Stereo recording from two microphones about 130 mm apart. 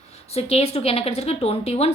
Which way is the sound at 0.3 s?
55° left (ahead or behind).